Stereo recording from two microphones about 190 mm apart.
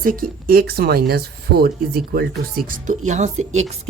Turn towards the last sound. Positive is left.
turn(degrees=-40)  # may be behind; listen again after turning